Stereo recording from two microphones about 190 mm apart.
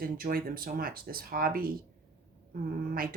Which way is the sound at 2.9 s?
50° right (ahead or behind).